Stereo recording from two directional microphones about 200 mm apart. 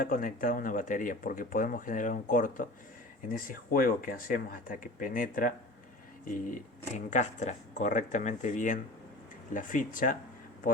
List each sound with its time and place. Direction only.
0.0 s speech: 45° left (ahead or behind)